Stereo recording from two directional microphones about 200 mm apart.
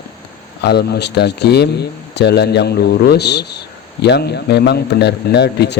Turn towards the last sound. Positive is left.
turn(degrees=55)  # may be behind; listen again after turning